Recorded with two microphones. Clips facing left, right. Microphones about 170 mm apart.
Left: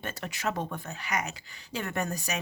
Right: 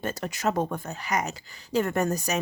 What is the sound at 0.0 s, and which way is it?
Speech, 40° right (ahead or behind).